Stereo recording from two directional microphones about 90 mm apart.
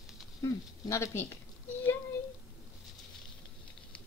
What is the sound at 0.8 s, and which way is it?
Speech, 35° left (ahead or behind).